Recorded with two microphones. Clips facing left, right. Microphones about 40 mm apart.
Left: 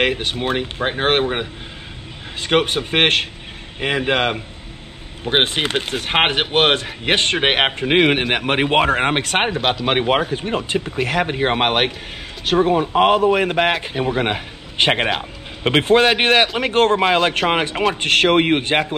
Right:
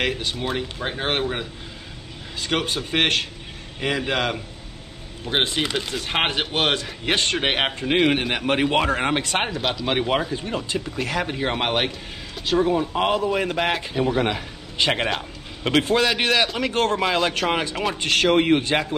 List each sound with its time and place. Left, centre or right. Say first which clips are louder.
0.0 s speech: left 5 dB; left
14.0 s a man's voice: left 2 dB; left